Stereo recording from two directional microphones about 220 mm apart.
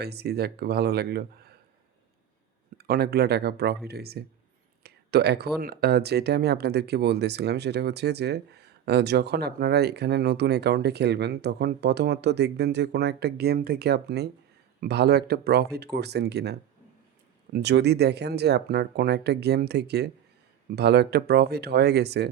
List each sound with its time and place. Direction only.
0.0 s speech: 45° right (ahead or behind)
2.7 s speech: 45° right (ahead or behind)